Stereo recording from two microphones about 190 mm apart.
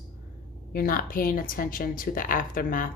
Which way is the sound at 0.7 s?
50° left (ahead or behind).